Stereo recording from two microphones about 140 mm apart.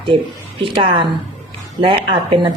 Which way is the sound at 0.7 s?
35° right (ahead or behind).